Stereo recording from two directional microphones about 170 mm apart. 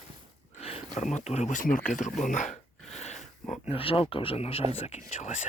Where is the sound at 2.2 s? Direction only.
45° left (ahead or behind).